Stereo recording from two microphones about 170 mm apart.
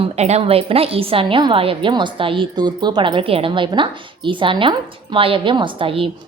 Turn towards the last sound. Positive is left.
turn(degrees=-30)  # may be behind; listen again after turning